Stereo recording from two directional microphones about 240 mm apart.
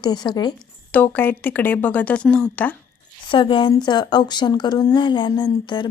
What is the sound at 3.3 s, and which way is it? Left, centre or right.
A woman's voice, left.